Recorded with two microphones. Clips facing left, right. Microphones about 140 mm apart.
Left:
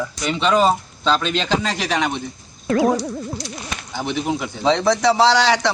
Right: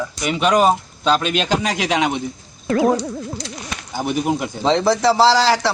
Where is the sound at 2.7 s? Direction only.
Centre (ahead or behind).